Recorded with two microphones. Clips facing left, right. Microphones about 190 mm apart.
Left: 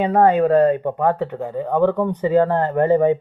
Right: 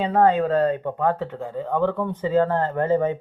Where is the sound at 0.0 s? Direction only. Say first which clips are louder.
Left 4 dB; 15° left (ahead or behind).